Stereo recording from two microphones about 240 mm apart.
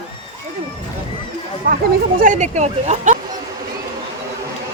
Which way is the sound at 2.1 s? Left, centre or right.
Right.